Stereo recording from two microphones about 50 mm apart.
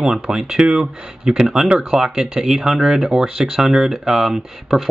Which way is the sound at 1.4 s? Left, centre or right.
Centre.